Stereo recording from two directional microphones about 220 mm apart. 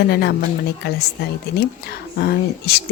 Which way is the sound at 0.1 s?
45° left (ahead or behind).